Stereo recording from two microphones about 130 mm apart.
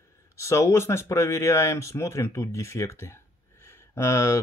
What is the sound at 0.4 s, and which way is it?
Speech, 25° left (ahead or behind).